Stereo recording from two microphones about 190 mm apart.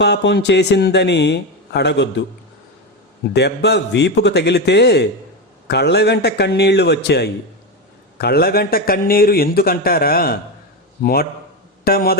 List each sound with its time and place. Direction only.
0.0 s a man's voice: 65° left (ahead or behind)
3.3 s a man's voice: 60° left (ahead or behind)